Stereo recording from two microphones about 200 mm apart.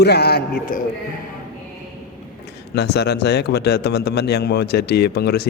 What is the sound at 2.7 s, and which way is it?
A man's voice, 55° left (ahead or behind).